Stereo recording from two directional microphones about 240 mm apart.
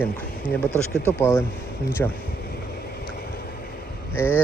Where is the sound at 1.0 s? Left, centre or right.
Centre.